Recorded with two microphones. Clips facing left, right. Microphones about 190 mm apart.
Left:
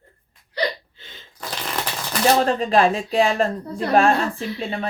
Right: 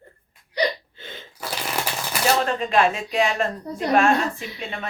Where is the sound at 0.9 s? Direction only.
60° right (ahead or behind).